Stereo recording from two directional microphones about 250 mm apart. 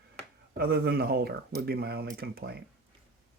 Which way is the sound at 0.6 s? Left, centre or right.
Right.